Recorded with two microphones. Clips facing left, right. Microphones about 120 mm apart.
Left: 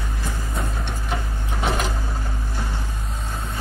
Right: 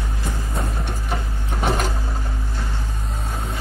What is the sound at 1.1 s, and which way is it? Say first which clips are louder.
Printer: even; centre (ahead or behind).